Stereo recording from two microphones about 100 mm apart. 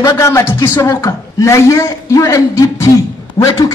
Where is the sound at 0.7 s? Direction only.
40° left (ahead or behind).